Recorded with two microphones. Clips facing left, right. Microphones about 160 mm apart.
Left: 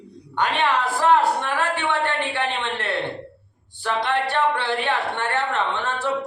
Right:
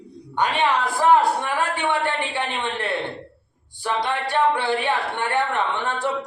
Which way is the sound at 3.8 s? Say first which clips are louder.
Left 1 dB; 15° right (ahead or behind).